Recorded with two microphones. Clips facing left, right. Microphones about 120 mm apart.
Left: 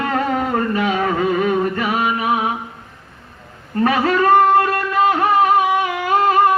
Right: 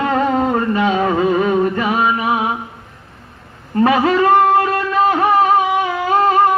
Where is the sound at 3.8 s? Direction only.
30° right (ahead or behind).